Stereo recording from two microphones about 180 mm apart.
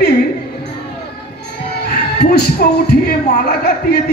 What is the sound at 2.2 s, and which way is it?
Speech, 65° left (ahead or behind).